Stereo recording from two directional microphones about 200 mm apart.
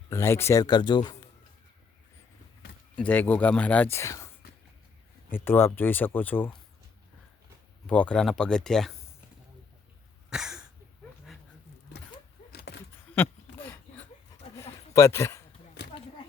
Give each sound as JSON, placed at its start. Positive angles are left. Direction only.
{"t": 0.1, "sound": "speech", "side_deg": 15}
{"t": 2.9, "sound": "speech", "side_deg": 10}
{"t": 5.3, "sound": "speech", "side_deg": 10}
{"t": 7.9, "sound": "speech", "side_deg": 5}
{"t": 10.2, "sound": "cough", "side_deg": -5}
{"t": 12.5, "sound": "a sound", "side_deg": 50}
{"t": 13.1, "sound": "a sound", "side_deg": 10}